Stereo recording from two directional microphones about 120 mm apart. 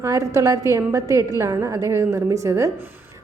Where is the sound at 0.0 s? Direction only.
25° right (ahead or behind).